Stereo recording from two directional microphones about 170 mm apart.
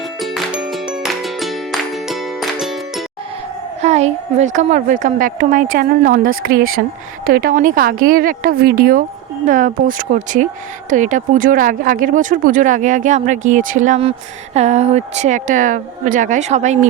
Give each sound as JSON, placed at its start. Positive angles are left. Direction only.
{"t": 0.2, "sound": "music", "side_deg": 0}
{"t": 3.8, "sound": "speech", "side_deg": -40}